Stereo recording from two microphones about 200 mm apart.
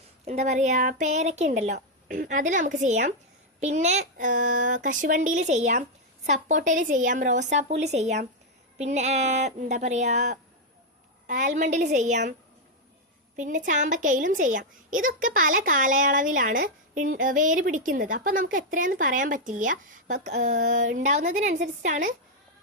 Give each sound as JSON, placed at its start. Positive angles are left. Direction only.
{"t": 0.3, "sound": "a child's voice", "side_deg": -35}
{"t": 13.3, "sound": "a woman's voice", "side_deg": -40}